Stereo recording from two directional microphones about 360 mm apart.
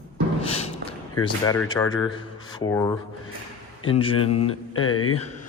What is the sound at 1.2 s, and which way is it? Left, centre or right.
A man's voice, centre.